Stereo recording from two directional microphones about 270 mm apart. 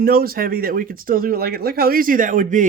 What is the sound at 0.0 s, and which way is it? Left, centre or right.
Speech, right.